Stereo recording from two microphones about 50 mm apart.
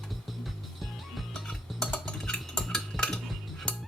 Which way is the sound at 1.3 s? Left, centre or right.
Centre.